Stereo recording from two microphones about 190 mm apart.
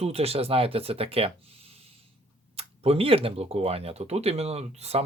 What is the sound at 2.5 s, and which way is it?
Speech, 30° right (ahead or behind).